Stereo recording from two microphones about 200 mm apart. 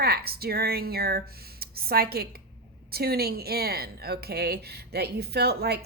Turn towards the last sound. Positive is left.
turn(degrees=-55)  # may be behind; listen again after turning